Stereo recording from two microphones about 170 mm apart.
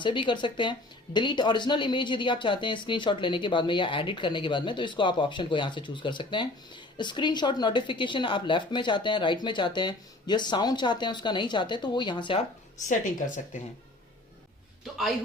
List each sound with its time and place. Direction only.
0.0 s speech: 30° left (ahead or behind)
12.9 s speech: 50° left (ahead or behind)